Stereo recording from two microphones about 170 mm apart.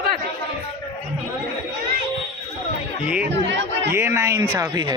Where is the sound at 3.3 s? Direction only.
90° right.